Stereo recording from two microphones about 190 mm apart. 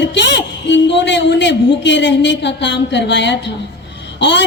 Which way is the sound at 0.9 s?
70° left (ahead or behind).